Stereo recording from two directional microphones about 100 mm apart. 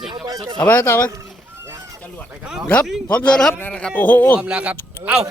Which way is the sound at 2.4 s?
5° right (ahead or behind).